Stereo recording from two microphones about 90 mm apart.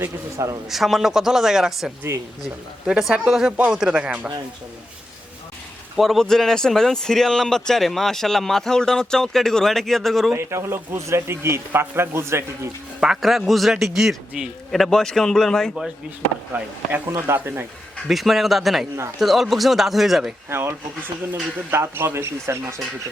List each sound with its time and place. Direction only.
0.0 s a man's voice: 35° right (ahead or behind)
0.7 s a man's voice: 5° right (ahead or behind)
6.0 s a man's voice: 5° left (ahead or behind)
10.3 s a man's voice: 30° right (ahead or behind)
13.0 s a man's voice: 5° right (ahead or behind)
16.5 s a man's voice: 25° right (ahead or behind)
18.1 s a man's voice: centre (ahead or behind)
20.5 s a man's voice: 25° right (ahead or behind)